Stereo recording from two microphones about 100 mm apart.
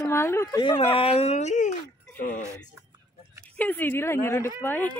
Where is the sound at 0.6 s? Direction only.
50° left (ahead or behind).